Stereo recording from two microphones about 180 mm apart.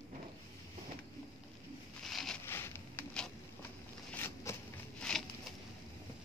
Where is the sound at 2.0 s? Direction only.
Centre (ahead or behind).